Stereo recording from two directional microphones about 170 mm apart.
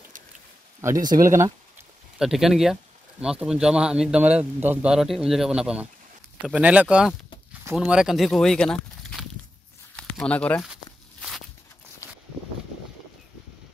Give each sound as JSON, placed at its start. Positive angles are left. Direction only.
{"t": 0.7, "sound": "speech", "side_deg": -20}
{"t": 2.1, "sound": "speech", "side_deg": 0}
{"t": 11.1, "sound": "walk", "side_deg": 0}
{"t": 12.0, "sound": "a sound", "side_deg": 15}